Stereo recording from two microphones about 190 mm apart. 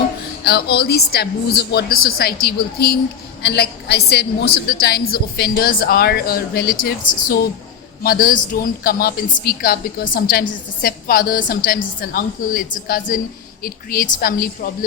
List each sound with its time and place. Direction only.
0.4 s a woman's voice: 55° left (ahead or behind)